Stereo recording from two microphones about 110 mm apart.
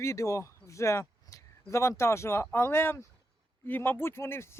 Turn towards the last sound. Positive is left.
turn(degrees=25)  # may be behind; listen again after turning